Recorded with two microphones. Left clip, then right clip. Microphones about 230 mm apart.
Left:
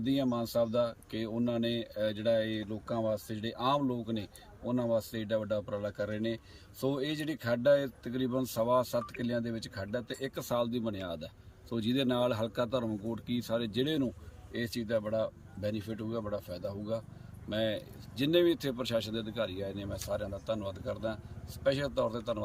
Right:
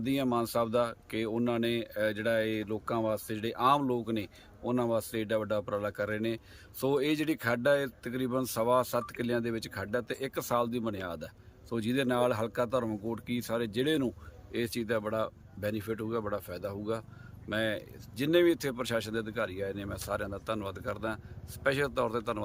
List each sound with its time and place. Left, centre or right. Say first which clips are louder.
0.0 s speech: right 2 dB; centre
1.6 s speech: right 2 dB; right
2.0 s speech: even; centre